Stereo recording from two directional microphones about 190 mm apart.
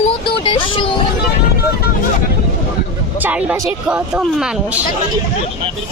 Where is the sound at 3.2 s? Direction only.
5° right (ahead or behind).